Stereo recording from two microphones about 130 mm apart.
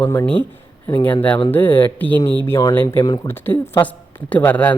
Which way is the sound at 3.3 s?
20° left (ahead or behind).